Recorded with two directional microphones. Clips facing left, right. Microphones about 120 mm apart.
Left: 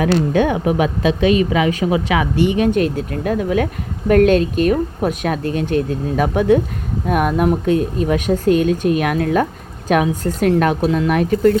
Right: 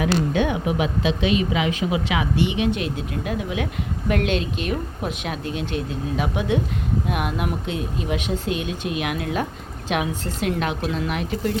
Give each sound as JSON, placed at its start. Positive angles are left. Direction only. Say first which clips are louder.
{"t": 0.0, "sound": "a woman's voice", "louder": "left 5 dB", "side_deg": 45}